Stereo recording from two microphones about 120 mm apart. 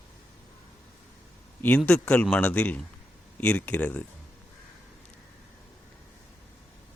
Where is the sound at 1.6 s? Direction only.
10° left (ahead or behind).